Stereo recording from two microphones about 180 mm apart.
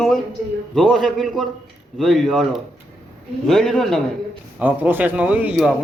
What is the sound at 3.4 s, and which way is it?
Speech, centre (ahead or behind).